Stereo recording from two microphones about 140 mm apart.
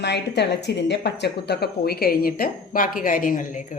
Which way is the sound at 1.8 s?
90° left.